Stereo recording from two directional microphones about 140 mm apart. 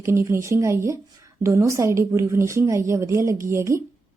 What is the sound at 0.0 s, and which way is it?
Speech, 20° right (ahead or behind).